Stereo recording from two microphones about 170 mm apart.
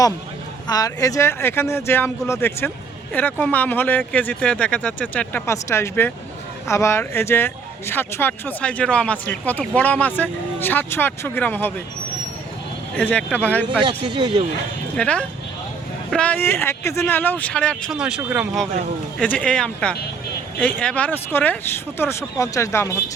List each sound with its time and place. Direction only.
0.7 s speech: 20° left (ahead or behind)
13.0 s speech: 5° left (ahead or behind)
13.8 s speech: 25° right (ahead or behind)
14.9 s speech: 5° left (ahead or behind); by 18.4 s 10° right (ahead or behind)
19.2 s speech: 10° left (ahead or behind)